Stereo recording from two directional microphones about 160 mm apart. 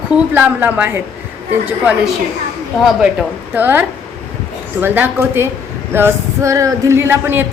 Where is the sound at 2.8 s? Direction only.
5° right (ahead or behind).